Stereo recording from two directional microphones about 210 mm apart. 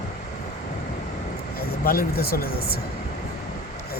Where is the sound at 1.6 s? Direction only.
45° left (ahead or behind).